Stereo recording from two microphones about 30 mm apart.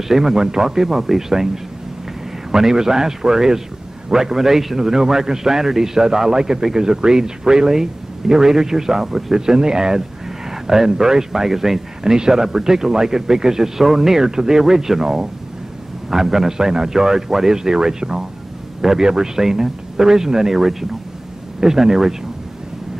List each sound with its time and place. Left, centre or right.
0.1 s a man's voice: centre